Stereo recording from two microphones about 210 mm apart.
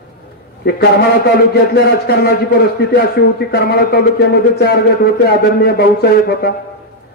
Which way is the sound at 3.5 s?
50° left (ahead or behind).